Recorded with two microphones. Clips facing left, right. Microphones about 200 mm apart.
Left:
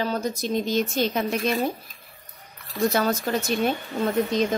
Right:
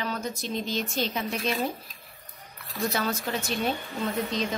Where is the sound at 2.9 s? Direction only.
45° left (ahead or behind).